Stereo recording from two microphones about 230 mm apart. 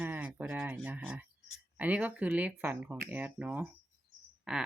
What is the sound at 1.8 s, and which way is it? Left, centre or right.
Speech, centre.